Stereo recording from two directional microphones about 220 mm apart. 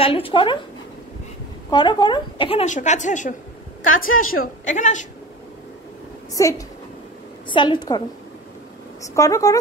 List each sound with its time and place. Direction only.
0.0 s a woman's voice: 25° left (ahead or behind)
1.7 s a woman's voice: 20° left (ahead or behind)
4.1 s a woman's voice: 70° left (ahead or behind)
4.6 s a woman's voice: 35° left (ahead or behind)
6.4 s a woman's voice: 15° left (ahead or behind)
9.1 s speech: 15° left (ahead or behind)